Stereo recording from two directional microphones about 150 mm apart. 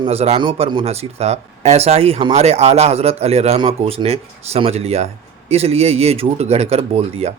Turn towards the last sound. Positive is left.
turn(degrees=-45)  # may be behind; listen again after turning